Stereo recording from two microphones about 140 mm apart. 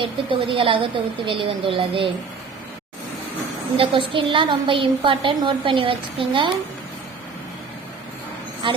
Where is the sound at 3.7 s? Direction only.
40° right (ahead or behind).